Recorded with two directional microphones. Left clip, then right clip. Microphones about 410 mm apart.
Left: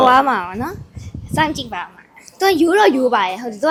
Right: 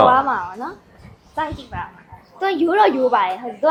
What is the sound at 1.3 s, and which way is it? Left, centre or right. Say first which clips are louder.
A woman's voice: left 6 dB; left.